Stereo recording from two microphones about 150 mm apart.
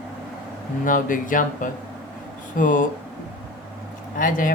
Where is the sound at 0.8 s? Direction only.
60° left (ahead or behind).